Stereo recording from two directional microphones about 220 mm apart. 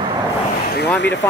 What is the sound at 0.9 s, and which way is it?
Speech, 55° left (ahead or behind).